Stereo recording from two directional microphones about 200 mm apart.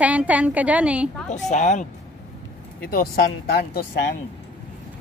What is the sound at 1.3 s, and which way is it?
Speech, 35° left (ahead or behind).